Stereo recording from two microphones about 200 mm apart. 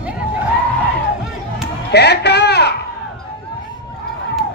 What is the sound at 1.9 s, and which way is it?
Speech, 55° left (ahead or behind).